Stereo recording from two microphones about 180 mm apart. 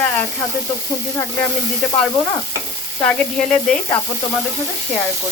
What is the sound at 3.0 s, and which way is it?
Speech, 5° left (ahead or behind).